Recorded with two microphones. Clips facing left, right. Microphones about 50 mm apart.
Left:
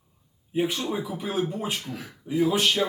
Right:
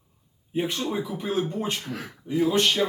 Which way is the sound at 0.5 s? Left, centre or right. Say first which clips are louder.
Even; centre.